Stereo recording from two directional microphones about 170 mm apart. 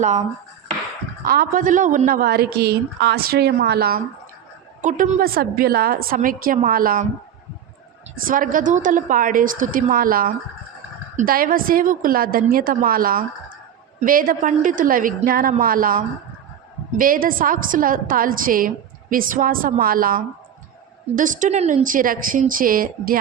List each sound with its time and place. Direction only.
0.0 s a woman's voice: 45° right (ahead or behind)
1.2 s a woman's voice: 55° right (ahead or behind)
4.8 s a woman's voice: 45° right (ahead or behind)
8.1 s a woman's voice: 55° right (ahead or behind)
21.8 s a woman's voice: 55° right (ahead or behind)